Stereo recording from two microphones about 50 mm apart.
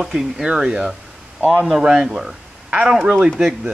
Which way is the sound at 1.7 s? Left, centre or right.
Centre.